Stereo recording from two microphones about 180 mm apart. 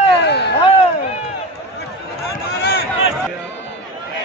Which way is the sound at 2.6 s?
65° left (ahead or behind).